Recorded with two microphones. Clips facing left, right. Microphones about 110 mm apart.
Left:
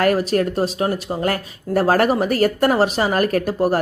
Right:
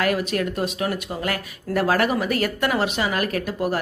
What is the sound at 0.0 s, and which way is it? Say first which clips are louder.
Speech: left 5 dB; 40° left (ahead or behind).